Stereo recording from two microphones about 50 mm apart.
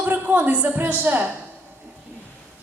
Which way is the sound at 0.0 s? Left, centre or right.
Right.